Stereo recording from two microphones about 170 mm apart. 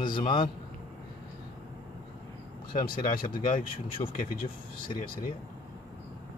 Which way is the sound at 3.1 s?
55° left (ahead or behind).